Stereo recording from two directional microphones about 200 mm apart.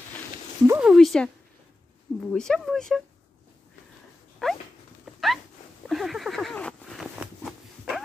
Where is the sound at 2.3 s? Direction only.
5° left (ahead or behind).